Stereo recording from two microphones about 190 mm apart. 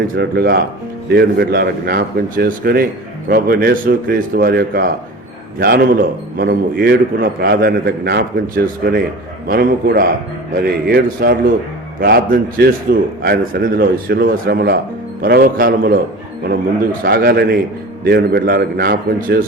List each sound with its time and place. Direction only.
0.2 s a man's voice: 60° right (ahead or behind)
17.0 s a man's voice: 55° right (ahead or behind)